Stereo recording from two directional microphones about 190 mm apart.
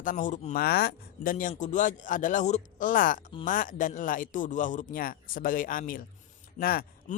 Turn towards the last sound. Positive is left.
turn(degrees=50)  # may be behind; listen again after turning